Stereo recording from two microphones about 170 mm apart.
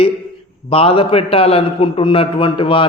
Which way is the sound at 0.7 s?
35° left (ahead or behind).